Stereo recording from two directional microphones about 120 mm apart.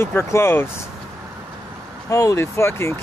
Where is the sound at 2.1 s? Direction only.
30° left (ahead or behind).